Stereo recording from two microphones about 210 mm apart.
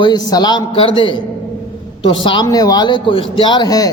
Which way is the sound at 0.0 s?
20° left (ahead or behind).